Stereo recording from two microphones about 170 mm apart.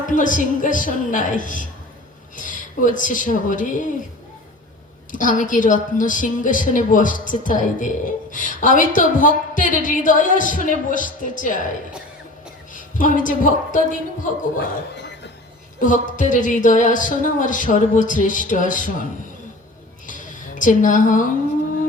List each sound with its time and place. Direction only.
0.0 s a woman's voice: 50° left (ahead or behind)
5.1 s a woman's voice: 50° left (ahead or behind)
12.7 s a woman's voice: 50° left (ahead or behind)
15.8 s a woman's voice: 50° left (ahead or behind)
20.6 s a woman's voice: 50° left (ahead or behind)